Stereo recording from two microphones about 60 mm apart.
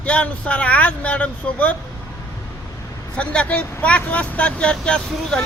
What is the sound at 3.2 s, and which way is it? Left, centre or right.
A man's voice, left.